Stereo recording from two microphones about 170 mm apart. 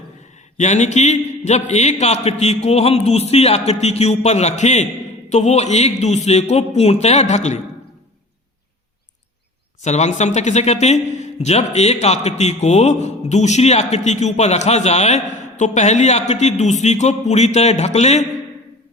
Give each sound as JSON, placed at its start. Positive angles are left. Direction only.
{"t": 0.5, "sound": "speech", "side_deg": 45}
{"t": 9.8, "sound": "speech", "side_deg": 40}